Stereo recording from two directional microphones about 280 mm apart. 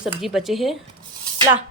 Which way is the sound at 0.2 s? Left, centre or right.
Centre.